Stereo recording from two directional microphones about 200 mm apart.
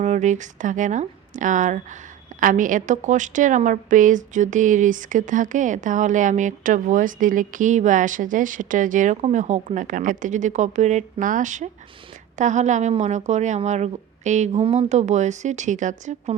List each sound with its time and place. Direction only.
0.0 s a woman's voice: 35° right (ahead or behind)